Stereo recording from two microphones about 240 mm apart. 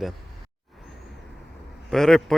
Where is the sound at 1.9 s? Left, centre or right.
Centre.